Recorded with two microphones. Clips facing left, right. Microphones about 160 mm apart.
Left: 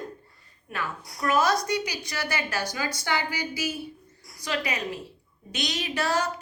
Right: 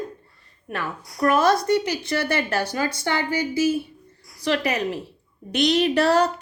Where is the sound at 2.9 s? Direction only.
25° right (ahead or behind).